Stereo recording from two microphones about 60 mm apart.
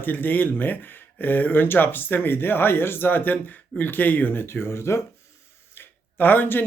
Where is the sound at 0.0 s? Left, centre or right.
Left.